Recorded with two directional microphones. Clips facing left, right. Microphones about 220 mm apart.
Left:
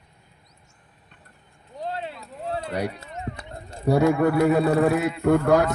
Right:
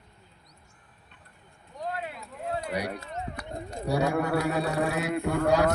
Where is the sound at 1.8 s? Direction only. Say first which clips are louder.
Left 3 dB; 30° left (ahead or behind).